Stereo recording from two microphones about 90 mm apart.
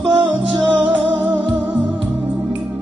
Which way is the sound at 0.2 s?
60° right (ahead or behind).